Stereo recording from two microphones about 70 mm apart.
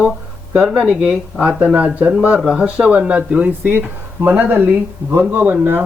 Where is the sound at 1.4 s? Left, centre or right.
Right.